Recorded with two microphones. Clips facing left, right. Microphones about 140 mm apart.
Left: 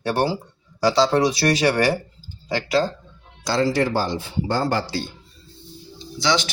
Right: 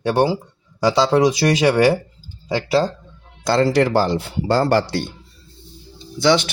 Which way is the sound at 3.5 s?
60° right (ahead or behind).